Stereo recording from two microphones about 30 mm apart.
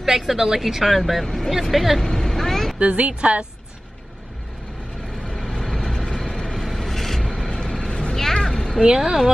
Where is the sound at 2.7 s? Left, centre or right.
Right.